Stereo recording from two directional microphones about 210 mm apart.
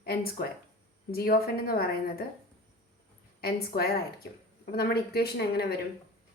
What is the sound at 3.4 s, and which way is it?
Speech, 45° left (ahead or behind).